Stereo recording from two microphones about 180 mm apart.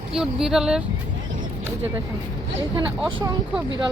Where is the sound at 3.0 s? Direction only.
25° right (ahead or behind).